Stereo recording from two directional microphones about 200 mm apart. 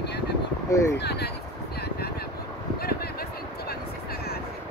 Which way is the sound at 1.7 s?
55° left (ahead or behind).